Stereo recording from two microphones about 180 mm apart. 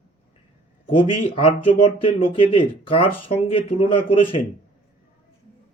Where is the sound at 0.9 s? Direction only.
30° left (ahead or behind).